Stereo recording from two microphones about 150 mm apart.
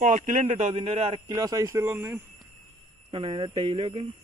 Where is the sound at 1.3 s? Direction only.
25° right (ahead or behind).